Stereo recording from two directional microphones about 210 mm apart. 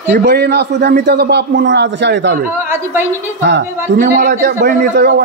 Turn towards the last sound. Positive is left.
turn(degrees=-50)  # may be behind; listen again after turning